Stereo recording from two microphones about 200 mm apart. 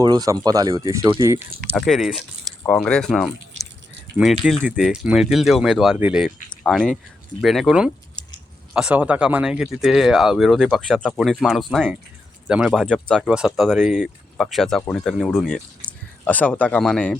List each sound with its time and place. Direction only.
0.0 s speech: 20° right (ahead or behind)
1.7 s speech: centre (ahead or behind)